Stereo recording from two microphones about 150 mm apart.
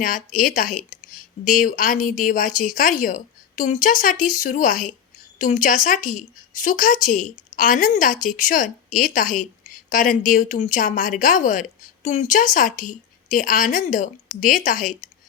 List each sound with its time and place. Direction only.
0.0 s speech: 65° left (ahead or behind)